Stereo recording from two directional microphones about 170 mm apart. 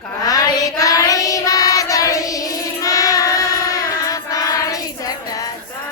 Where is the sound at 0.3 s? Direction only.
20° left (ahead or behind).